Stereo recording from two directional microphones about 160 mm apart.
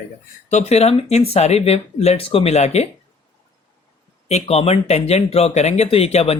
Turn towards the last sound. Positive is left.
turn(degrees=40)  # may be behind; listen again after turning